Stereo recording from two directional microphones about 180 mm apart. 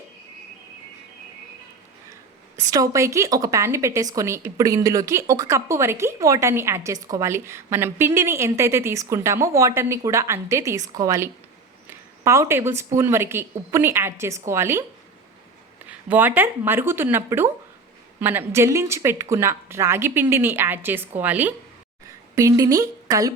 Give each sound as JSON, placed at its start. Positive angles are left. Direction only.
{"t": 2.6, "sound": "a woman's voice", "side_deg": -20}
{"t": 15.9, "sound": "a woman's voice", "side_deg": -10}